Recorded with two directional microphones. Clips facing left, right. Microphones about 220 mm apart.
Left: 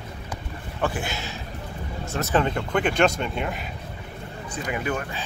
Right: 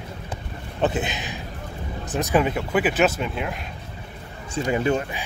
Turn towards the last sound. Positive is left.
turn(degrees=-25)  # may be behind; listen again after turning